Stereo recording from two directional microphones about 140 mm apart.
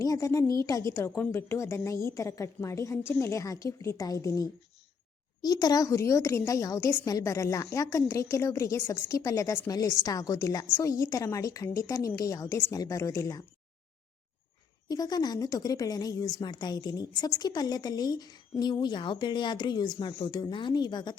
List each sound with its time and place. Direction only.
0.0 s a woman's voice: 25° left (ahead or behind)
14.8 s a woman's voice: 30° left (ahead or behind)